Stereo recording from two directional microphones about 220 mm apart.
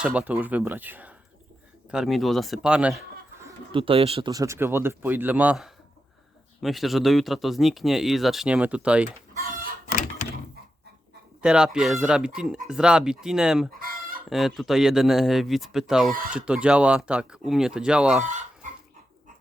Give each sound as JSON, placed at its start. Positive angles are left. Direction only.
{"t": 0.0, "sound": "speech", "side_deg": -5}
{"t": 3.4, "sound": "speech", "side_deg": -25}
{"t": 9.5, "sound": "chicken", "side_deg": -40}
{"t": 11.4, "sound": "speech", "side_deg": -5}
{"t": 13.7, "sound": "chicken", "side_deg": -40}
{"t": 14.3, "sound": "speech", "side_deg": 0}
{"t": 18.2, "sound": "speech", "side_deg": -35}